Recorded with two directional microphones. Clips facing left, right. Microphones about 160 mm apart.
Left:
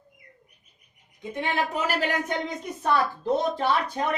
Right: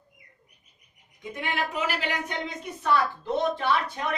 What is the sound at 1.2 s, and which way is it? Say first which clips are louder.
Speech: left 3 dB; 30° left (ahead or behind).